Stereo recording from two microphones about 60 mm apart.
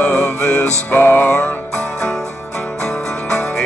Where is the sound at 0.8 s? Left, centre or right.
Left.